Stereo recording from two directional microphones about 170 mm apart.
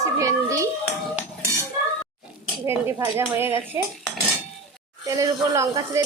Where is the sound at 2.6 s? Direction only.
15° right (ahead or behind).